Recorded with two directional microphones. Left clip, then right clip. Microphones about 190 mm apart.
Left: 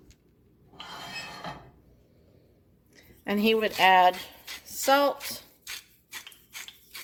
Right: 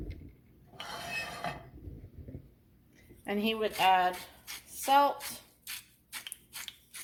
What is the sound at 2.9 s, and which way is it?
Speech, 40° left (ahead or behind).